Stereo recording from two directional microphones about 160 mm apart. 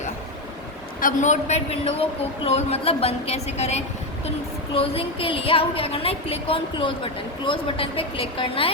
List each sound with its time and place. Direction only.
1.0 s a woman's voice: 50° left (ahead or behind)